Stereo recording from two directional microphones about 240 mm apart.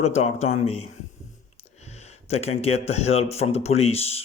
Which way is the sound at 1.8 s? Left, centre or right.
Left.